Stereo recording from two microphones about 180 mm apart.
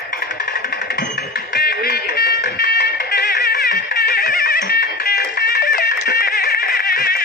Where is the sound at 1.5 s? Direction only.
65° left (ahead or behind).